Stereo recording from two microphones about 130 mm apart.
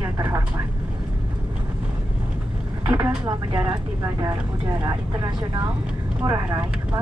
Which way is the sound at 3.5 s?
40° right (ahead or behind).